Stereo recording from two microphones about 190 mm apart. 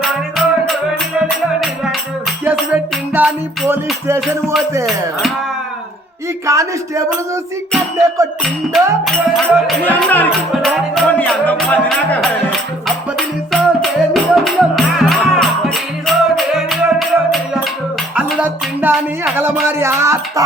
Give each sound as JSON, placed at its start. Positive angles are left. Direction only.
{"t": 0.0, "sound": "music", "side_deg": 0}
{"t": 6.4, "sound": "music", "side_deg": -15}
{"t": 8.7, "sound": "music", "side_deg": 0}